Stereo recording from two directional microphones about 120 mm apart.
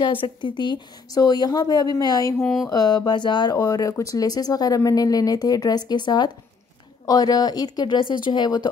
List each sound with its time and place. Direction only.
0.0 s speech: 45° left (ahead or behind)
2.4 s a sound: centre (ahead or behind)
2.7 s speech: 35° left (ahead or behind)